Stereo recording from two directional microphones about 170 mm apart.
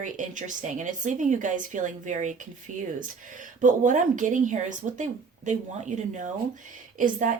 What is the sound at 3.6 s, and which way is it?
Speech, 50° right (ahead or behind).